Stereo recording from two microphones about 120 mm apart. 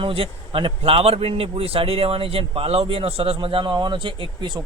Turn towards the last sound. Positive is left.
turn(degrees=-40)  # may be behind; listen again after turning